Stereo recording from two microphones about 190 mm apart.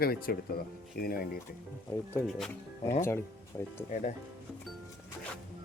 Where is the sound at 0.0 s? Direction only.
55° left (ahead or behind).